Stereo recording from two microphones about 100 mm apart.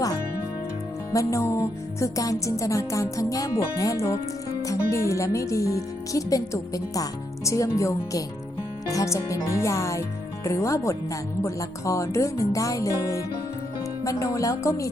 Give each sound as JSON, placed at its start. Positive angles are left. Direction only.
{"t": 1.1, "sound": "speech", "side_deg": 30}